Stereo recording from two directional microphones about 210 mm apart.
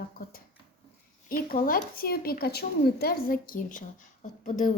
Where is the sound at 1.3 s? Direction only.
40° left (ahead or behind).